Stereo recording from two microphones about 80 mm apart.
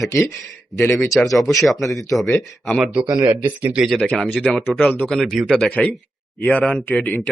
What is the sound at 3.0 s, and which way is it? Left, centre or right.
Speech, right.